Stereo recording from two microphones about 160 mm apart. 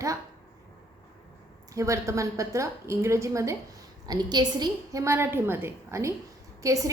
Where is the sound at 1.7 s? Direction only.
20° right (ahead or behind).